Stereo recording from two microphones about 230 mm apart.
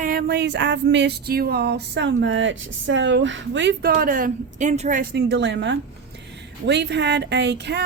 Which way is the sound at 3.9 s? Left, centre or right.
Right.